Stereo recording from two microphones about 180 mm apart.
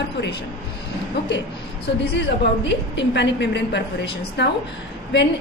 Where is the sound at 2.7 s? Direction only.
75° left (ahead or behind).